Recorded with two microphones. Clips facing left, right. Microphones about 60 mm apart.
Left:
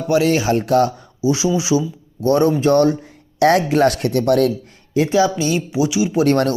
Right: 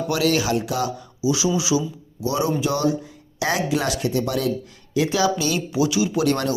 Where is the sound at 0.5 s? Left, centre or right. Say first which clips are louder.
Left 8 dB; left.